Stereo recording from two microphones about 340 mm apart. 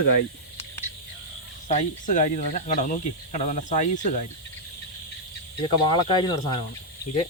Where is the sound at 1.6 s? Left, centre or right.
Left.